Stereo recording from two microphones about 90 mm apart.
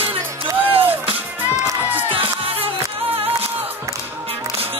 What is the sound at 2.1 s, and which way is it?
Music, 90° right.